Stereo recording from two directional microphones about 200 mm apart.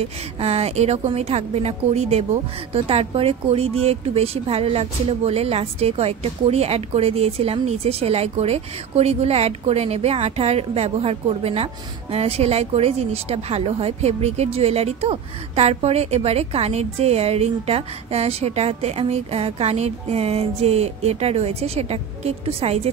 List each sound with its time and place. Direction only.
0.0 s a woman's voice: 30° right (ahead or behind)